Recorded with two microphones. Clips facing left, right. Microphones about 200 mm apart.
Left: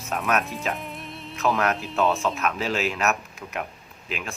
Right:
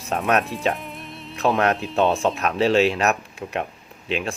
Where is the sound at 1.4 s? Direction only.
30° right (ahead or behind).